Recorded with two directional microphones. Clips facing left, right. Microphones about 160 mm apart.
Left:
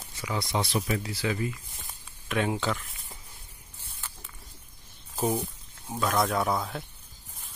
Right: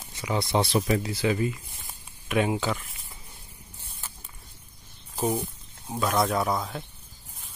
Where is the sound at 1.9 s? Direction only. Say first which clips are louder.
Right 4 dB; 10° right (ahead or behind).